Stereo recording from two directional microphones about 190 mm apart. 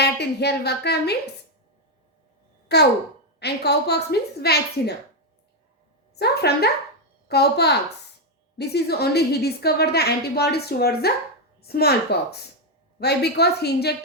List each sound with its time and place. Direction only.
0.0 s a woman's voice: 60° left (ahead or behind)
2.7 s a woman's voice: 60° left (ahead or behind)
6.1 s a woman's voice: 60° left (ahead or behind)